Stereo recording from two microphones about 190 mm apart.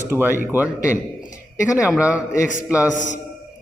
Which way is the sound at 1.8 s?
5° right (ahead or behind).